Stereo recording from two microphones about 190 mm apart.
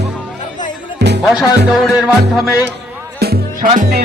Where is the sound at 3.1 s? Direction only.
55° right (ahead or behind).